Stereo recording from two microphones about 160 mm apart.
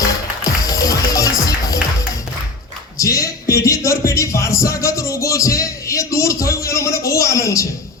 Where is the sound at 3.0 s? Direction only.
20° left (ahead or behind).